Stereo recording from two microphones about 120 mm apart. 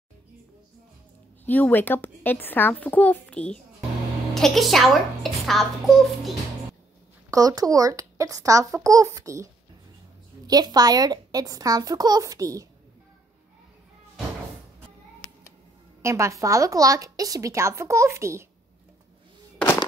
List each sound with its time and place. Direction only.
1.4 s a woman's voice: 15° left (ahead or behind)
7.2 s a woman's voice: 30° right (ahead or behind)
16.0 s a woman's voice: 25° right (ahead or behind)